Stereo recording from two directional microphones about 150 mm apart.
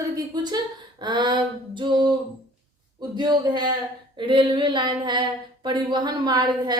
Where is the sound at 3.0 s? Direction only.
30° right (ahead or behind).